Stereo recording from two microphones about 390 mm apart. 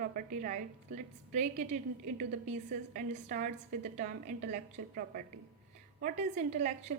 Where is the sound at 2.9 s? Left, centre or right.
Centre.